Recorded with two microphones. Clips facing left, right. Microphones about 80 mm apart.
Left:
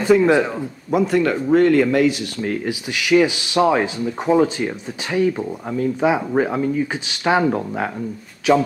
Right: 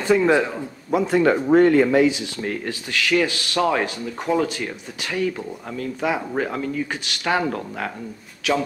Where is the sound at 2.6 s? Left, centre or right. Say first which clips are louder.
Left 3 dB; centre.